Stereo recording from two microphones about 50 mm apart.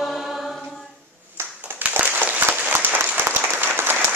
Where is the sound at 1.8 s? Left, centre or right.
Right.